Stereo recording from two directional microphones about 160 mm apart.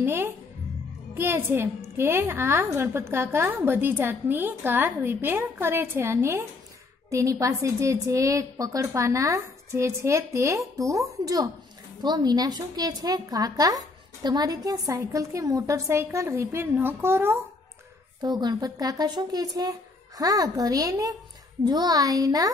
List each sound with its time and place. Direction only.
0.0 s a woman's voice: 15° right (ahead or behind)
18.2 s a woman's voice: 25° right (ahead or behind)